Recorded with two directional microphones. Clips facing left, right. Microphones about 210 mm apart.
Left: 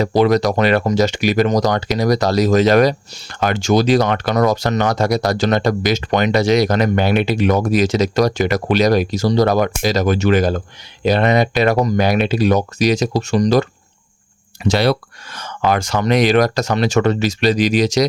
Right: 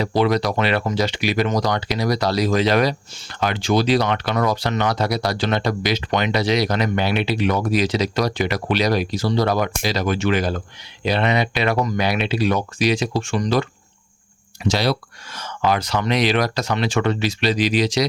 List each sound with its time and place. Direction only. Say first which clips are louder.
0.0 s speech: left 5 dB; 45° left (ahead or behind)
14.6 s speech: left 5 dB; 55° left (ahead or behind)